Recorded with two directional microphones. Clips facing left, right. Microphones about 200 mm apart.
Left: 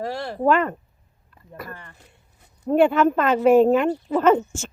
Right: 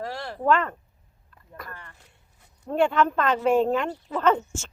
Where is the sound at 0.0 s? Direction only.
30° left (ahead or behind).